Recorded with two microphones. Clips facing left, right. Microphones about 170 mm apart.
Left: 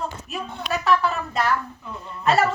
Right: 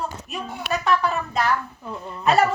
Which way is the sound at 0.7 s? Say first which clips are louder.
Even; centre (ahead or behind).